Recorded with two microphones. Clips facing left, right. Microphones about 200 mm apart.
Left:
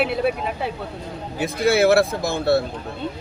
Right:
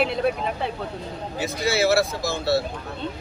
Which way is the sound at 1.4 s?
55° left (ahead or behind).